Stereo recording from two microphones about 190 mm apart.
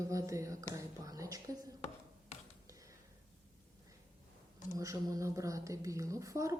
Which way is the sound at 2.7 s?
15° right (ahead or behind).